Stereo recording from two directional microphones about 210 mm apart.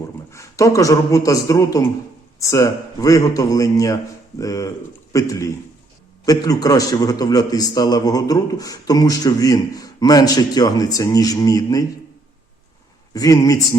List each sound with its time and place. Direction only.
0.3 s a man's voice: 15° left (ahead or behind)
13.1 s a man's voice: 15° left (ahead or behind)